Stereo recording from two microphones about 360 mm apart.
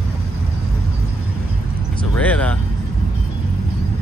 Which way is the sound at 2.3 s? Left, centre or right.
Centre.